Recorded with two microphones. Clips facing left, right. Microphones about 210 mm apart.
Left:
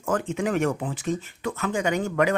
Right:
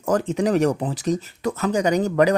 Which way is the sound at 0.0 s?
40° right (ahead or behind).